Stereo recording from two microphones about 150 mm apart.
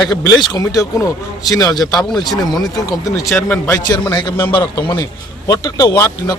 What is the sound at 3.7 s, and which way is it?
A man's voice, 25° left (ahead or behind).